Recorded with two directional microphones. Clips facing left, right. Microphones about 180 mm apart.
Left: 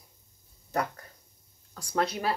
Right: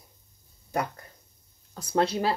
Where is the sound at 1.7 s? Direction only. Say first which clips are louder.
Right 4 dB; 25° right (ahead or behind).